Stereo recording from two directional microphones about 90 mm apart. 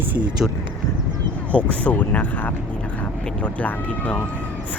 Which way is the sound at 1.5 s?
15° left (ahead or behind).